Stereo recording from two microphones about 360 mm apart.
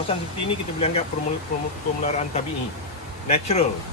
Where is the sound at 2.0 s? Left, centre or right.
Centre.